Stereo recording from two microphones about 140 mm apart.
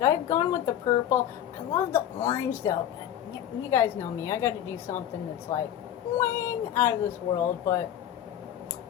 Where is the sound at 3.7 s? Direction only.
20° left (ahead or behind).